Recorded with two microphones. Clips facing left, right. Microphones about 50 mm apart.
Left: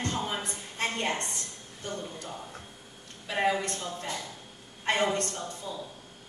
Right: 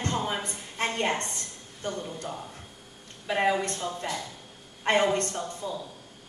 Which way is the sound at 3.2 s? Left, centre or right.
Centre.